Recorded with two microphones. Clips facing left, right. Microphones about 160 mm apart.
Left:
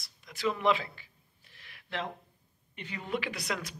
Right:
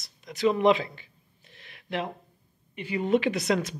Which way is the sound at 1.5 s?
20° right (ahead or behind).